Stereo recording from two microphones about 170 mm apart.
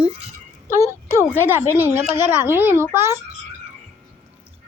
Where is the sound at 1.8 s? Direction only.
10° right (ahead or behind).